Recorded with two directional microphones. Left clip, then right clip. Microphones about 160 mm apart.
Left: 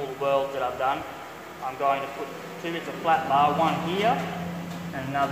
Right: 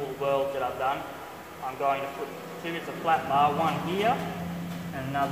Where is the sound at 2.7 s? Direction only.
30° left (ahead or behind).